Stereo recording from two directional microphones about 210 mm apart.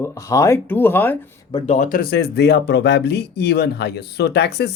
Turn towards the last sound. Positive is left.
turn(degrees=50)  # may be behind; listen again after turning